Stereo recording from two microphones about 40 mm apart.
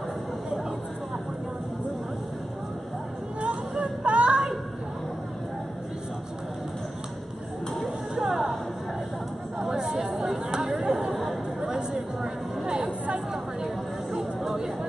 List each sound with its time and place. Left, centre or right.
3.3 s a sound: right
8.2 s music: centre
10.3 s chatter: right
14.1 s chatter: centre